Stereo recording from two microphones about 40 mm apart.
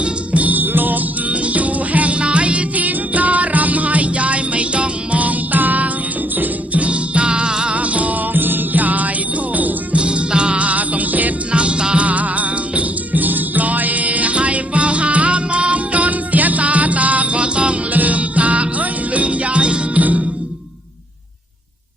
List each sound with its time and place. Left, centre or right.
0.0 s music: right
6.8 s music: right
7.8 s music: right
8.3 s music: right
9.6 s jingle bell: right
10.0 s music: right
10.7 s music: right
11.5 s music: right
12.0 s music: right
17.9 s music: right
20.0 s music: right